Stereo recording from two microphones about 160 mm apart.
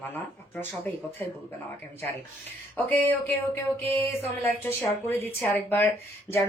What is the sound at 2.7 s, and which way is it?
Speech, 10° left (ahead or behind).